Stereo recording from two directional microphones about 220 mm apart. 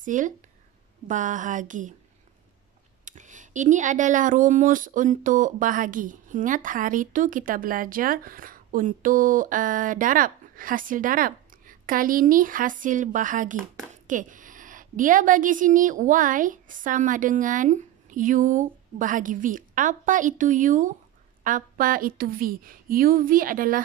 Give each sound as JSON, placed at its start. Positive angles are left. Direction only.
{"t": 0.0, "sound": "speech", "side_deg": -35}
{"t": 3.1, "sound": "speech", "side_deg": -35}